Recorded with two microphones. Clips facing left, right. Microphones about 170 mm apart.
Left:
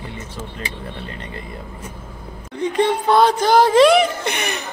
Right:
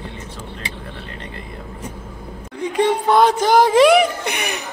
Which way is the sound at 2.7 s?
15° right (ahead or behind).